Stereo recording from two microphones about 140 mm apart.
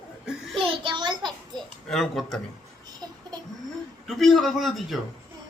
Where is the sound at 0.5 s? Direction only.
40° right (ahead or behind).